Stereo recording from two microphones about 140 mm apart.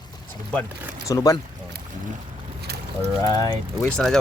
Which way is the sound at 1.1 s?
25° left (ahead or behind).